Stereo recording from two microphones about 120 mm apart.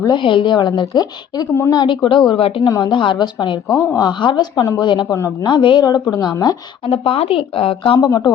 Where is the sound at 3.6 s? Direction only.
30° left (ahead or behind).